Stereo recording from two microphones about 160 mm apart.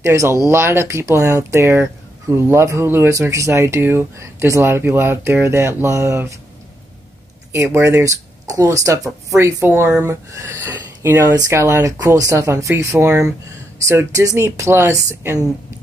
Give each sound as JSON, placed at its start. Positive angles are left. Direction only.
{"t": 0.0, "sound": "speech", "side_deg": -20}
{"t": 7.5, "sound": "speech", "side_deg": -15}